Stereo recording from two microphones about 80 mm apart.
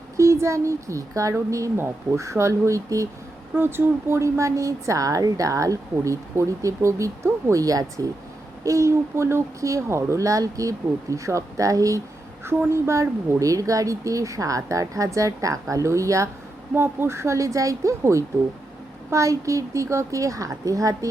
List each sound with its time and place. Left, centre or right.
0.2 s a woman's voice: right
3.5 s a woman's voice: right
7.6 s a woman's voice: right
16.7 s a woman's voice: right